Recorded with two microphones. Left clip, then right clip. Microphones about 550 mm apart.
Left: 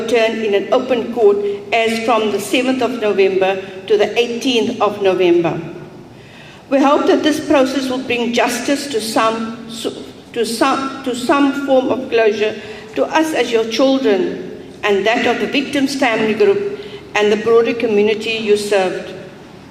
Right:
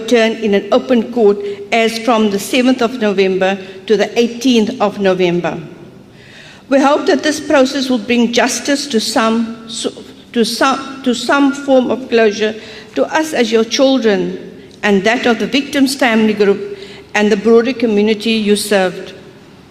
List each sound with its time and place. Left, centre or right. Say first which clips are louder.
0.1 s speech: right 3 dB; right
6.7 s speech: right 1 dB; right
10.3 s a woman's voice: right 2 dB; right